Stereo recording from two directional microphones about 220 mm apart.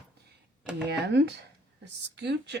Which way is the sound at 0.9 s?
50° right (ahead or behind).